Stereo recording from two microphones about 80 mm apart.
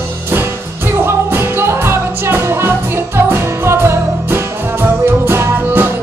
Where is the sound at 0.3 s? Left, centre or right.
Right.